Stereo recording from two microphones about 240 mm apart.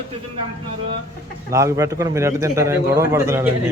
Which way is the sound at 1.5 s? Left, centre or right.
Centre.